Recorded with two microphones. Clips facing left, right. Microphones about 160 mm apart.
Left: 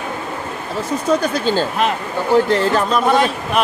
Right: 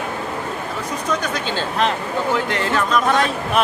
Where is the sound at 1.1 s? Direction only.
35° left (ahead or behind).